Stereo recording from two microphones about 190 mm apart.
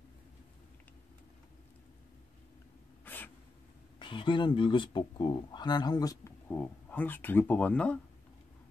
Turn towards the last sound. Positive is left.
turn(degrees=5)  # may be behind; listen again after turning